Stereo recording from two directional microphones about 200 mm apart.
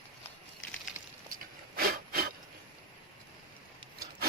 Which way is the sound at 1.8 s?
50° right (ahead or behind).